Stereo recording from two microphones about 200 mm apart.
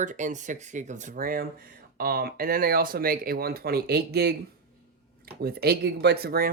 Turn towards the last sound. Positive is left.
turn(degrees=-50)  # may be behind; listen again after turning